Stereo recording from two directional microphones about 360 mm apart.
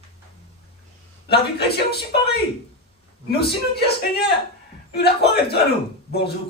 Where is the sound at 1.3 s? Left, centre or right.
Left.